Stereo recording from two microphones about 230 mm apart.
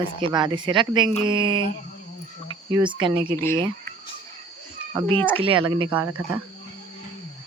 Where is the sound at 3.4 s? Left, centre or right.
Centre.